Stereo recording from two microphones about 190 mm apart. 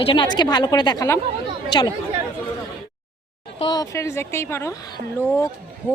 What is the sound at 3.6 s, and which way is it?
Speech, 20° left (ahead or behind).